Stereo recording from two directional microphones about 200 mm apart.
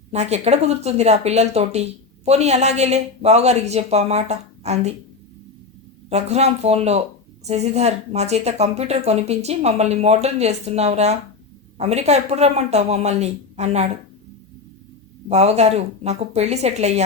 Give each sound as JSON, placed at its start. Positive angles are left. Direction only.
{"t": 0.1, "sound": "speech", "side_deg": -35}
{"t": 6.1, "sound": "speech", "side_deg": -30}
{"t": 15.3, "sound": "speech", "side_deg": -35}